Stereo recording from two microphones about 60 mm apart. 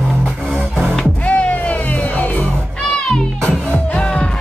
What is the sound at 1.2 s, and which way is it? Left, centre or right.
Music, left.